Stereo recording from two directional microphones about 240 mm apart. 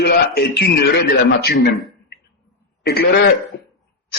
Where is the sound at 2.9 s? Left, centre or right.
Left.